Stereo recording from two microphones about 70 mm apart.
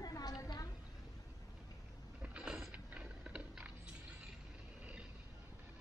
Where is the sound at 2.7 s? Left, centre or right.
Centre.